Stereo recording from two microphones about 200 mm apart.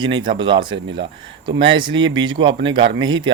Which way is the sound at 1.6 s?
25° right (ahead or behind).